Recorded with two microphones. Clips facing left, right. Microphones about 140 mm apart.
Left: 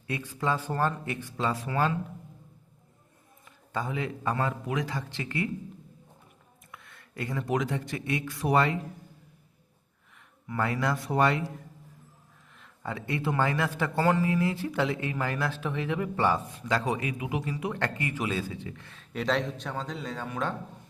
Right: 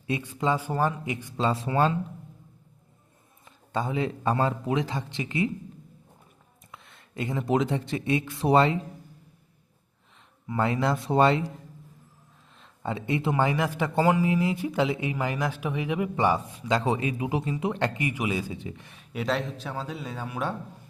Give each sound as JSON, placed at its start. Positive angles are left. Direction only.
{"t": 0.1, "sound": "a man's voice", "side_deg": -20}
{"t": 1.4, "sound": "a man's voice", "side_deg": -25}
{"t": 3.4, "sound": "a man's voice", "side_deg": -25}
{"t": 6.7, "sound": "speech", "side_deg": -25}
{"t": 10.2, "sound": "speech", "side_deg": -25}
{"t": 12.5, "sound": "a man's voice", "side_deg": -25}
{"t": 19.1, "sound": "speech", "side_deg": 0}